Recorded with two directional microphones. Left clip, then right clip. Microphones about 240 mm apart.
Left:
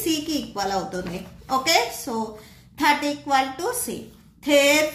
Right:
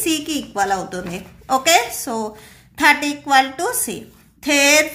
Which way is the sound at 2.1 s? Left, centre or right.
Right.